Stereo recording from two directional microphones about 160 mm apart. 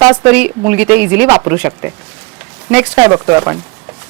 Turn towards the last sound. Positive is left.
turn(degrees=-10)  # may be behind; listen again after turning